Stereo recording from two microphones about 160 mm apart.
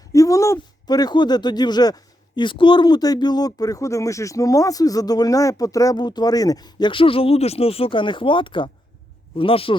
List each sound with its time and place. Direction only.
0.1 s speech: 20° left (ahead or behind)